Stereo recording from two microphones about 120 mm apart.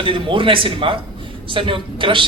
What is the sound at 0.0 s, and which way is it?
Speech, 45° right (ahead or behind).